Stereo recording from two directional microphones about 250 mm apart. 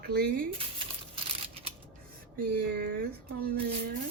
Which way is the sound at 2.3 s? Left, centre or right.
Right.